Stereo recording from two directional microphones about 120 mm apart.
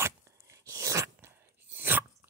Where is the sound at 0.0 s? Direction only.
25° right (ahead or behind).